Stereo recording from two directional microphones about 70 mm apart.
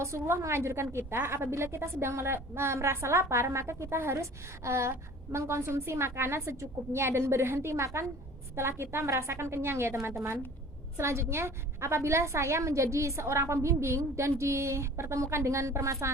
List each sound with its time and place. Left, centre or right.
0.0 s a woman's voice: right